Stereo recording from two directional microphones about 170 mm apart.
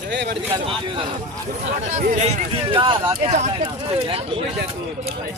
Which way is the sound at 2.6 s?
30° right (ahead or behind).